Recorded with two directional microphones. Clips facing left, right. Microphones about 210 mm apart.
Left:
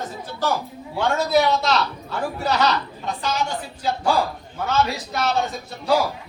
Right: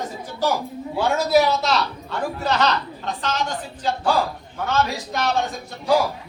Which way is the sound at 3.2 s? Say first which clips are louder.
Left 1 dB; 10° left (ahead or behind).